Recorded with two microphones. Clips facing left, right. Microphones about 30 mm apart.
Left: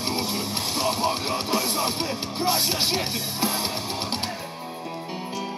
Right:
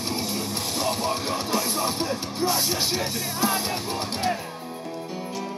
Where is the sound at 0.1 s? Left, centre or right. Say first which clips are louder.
Left 1 dB; left.